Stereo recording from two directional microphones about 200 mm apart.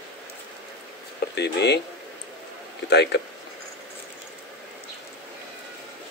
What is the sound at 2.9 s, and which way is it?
Speech, 55° left (ahead or behind).